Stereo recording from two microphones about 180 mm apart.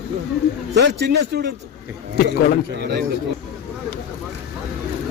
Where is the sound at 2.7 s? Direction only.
65° right (ahead or behind).